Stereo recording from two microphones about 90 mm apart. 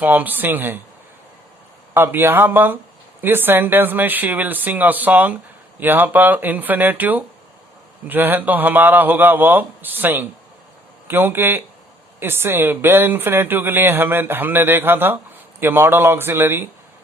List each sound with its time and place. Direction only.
0.0 s speech: 20° right (ahead or behind)
1.9 s speech: 25° right (ahead or behind)